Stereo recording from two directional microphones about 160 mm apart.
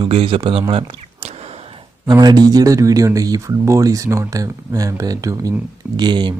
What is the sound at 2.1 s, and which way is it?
Speech, 25° right (ahead or behind).